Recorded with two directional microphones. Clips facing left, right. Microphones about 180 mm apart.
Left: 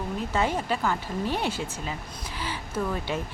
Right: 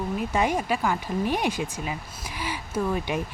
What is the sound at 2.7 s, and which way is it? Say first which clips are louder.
Speech: right 3 dB; 15° right (ahead or behind).